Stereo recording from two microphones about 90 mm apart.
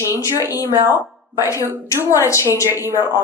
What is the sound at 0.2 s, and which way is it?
Speech, 35° left (ahead or behind).